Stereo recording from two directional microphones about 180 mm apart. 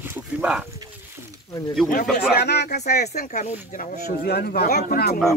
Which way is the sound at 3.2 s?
45° left (ahead or behind).